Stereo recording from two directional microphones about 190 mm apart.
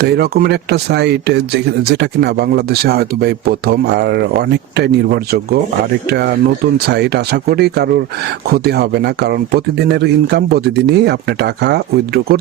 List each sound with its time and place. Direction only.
0.0 s speech: 55° right (ahead or behind)